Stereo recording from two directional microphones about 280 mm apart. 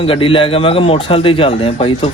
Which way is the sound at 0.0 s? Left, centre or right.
Centre.